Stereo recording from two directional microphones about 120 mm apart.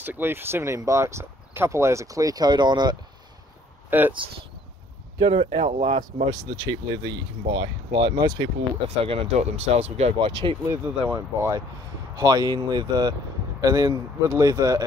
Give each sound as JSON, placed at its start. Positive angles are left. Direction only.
{"t": 0.0, "sound": "speech", "side_deg": -15}
{"t": 3.9, "sound": "speech", "side_deg": -15}
{"t": 5.2, "sound": "speech", "side_deg": -50}
{"t": 5.5, "sound": "speech", "side_deg": -75}
{"t": 6.6, "sound": "speech", "side_deg": -35}
{"t": 8.8, "sound": "speech", "side_deg": -50}
{"t": 10.1, "sound": "speech", "side_deg": -45}
{"t": 10.7, "sound": "speech", "side_deg": -25}